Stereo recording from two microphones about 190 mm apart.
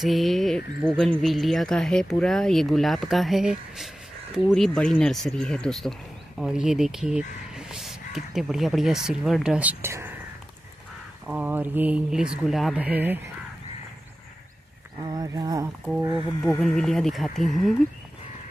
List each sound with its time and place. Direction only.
0.0 s speech: centre (ahead or behind)
11.2 s speech: 10° right (ahead or behind)
15.1 s speech: 20° right (ahead or behind)
16.5 s speech: centre (ahead or behind)